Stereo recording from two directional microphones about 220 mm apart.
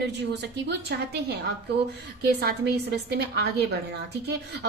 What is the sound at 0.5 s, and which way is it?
A woman's voice, 50° right (ahead or behind).